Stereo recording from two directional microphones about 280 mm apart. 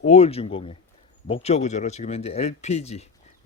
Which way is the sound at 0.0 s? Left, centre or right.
Left.